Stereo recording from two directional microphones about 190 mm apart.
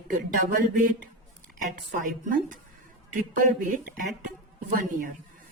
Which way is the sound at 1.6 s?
45° right (ahead or behind).